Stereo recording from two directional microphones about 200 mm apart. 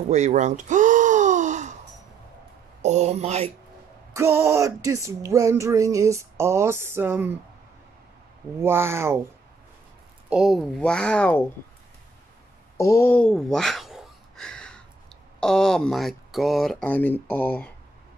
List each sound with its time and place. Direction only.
0.1 s gasp: 35° right (ahead or behind)
2.8 s speech: 35° right (ahead or behind)
4.1 s speech: 15° right (ahead or behind)
8.5 s speech: 10° right (ahead or behind)
10.3 s speech: centre (ahead or behind)
12.7 s a sound: 15° left (ahead or behind)
15.4 s speech: 5° left (ahead or behind)